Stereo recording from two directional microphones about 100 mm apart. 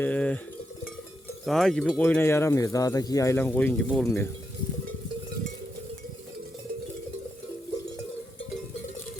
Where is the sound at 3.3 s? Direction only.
20° left (ahead or behind).